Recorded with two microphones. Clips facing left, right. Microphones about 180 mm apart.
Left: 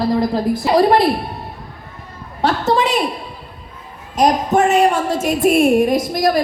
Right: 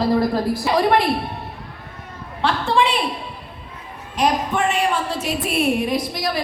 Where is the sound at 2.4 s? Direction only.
40° left (ahead or behind).